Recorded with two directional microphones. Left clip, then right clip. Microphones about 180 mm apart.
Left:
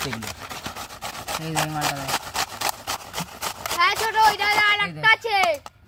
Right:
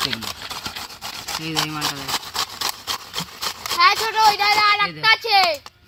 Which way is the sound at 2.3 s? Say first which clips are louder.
Right 1 dB; 15° left (ahead or behind).